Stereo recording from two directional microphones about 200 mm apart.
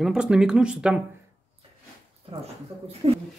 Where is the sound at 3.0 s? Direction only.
30° right (ahead or behind).